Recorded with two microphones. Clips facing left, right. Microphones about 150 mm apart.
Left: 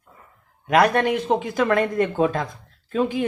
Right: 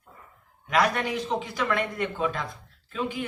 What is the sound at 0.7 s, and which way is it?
A man's voice, 50° left (ahead or behind).